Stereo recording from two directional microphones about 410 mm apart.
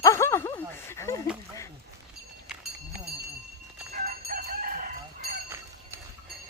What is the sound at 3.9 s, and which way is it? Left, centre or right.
Chicken, right.